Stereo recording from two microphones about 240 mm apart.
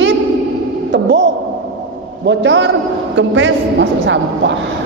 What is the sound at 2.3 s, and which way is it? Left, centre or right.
A woman's voice, right.